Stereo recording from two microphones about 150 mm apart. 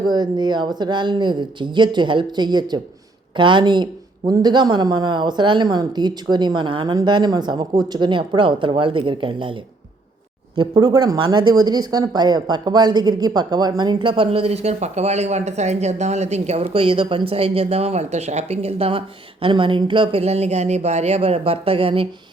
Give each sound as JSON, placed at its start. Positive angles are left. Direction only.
{"t": 0.1, "sound": "speech", "side_deg": -30}
{"t": 10.5, "sound": "speech", "side_deg": -30}